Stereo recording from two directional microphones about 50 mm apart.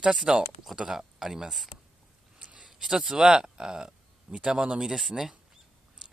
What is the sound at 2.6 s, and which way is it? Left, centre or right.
Speech, centre.